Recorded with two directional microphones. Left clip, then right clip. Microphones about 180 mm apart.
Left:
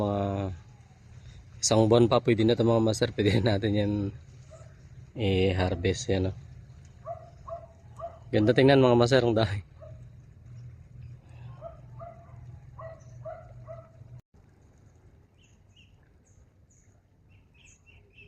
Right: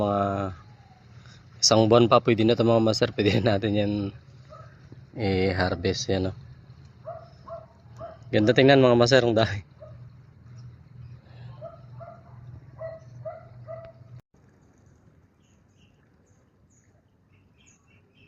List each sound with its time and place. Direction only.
0.0 s a sound: 20° left (ahead or behind)
1.5 s speech: 20° left (ahead or behind)
5.5 s speech: 25° left (ahead or behind)
7.9 s speech: 15° left (ahead or behind)